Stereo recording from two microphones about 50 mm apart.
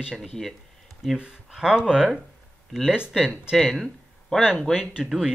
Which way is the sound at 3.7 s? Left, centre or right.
Centre.